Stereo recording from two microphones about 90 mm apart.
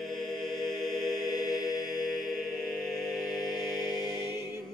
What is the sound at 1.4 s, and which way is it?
Chant, 45° left (ahead or behind).